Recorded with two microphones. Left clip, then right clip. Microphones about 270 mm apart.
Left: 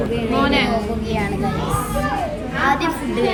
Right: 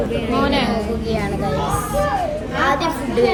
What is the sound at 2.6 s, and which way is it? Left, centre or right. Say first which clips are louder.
Speech: left 1 dB; centre.